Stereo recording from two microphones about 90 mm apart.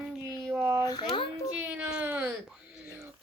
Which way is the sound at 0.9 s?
60° left (ahead or behind).